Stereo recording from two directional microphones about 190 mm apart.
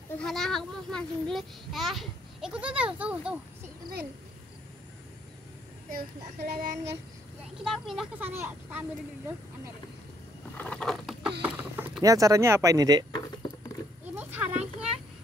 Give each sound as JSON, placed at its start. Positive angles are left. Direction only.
{"t": 0.2, "sound": "a child's voice", "side_deg": 0}
{"t": 5.9, "sound": "child singing", "side_deg": -50}
{"t": 7.6, "sound": "a child's voice", "side_deg": 0}
{"t": 10.6, "sound": "vehicle", "side_deg": 5}
{"t": 11.4, "sound": "speech", "side_deg": -10}
{"t": 14.1, "sound": "a sound", "side_deg": -10}